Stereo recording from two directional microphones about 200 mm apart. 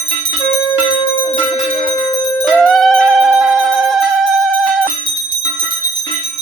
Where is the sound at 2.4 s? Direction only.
Centre (ahead or behind).